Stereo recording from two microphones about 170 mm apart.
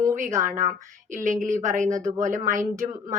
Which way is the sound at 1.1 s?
50° right (ahead or behind).